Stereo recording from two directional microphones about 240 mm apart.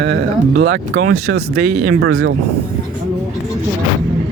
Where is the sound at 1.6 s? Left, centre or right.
Right.